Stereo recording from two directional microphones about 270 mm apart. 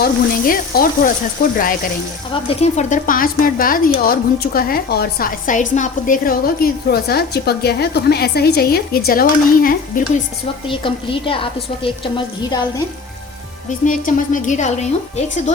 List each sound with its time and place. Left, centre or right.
0.0 s speech: left
10.7 s a woman's voice: centre
13.7 s a woman's voice: left